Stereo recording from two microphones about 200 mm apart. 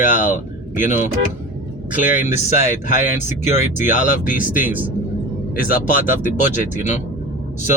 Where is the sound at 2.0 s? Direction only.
35° left (ahead or behind).